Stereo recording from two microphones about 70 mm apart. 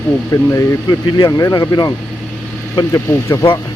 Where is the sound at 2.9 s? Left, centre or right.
Left.